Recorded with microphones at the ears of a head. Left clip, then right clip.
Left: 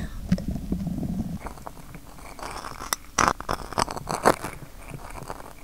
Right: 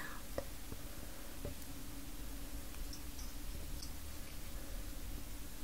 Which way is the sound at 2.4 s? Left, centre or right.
Left.